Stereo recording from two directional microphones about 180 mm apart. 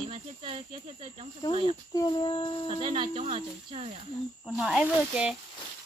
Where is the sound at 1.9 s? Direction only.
25° left (ahead or behind).